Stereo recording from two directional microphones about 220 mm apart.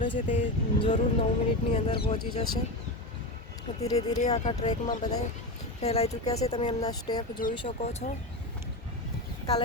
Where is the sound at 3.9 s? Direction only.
30° left (ahead or behind).